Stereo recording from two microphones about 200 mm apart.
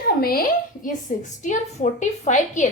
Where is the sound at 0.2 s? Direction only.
50° left (ahead or behind).